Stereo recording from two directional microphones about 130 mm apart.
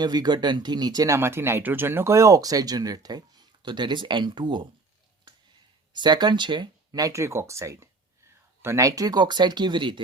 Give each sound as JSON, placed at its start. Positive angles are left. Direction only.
{"t": 0.0, "sound": "speech", "side_deg": -35}
{"t": 5.9, "sound": "speech", "side_deg": -35}